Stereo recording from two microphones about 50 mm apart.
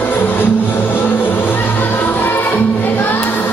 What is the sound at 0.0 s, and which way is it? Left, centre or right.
Music, left.